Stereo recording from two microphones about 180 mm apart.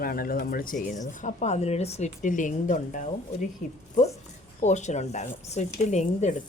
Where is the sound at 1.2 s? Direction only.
40° left (ahead or behind).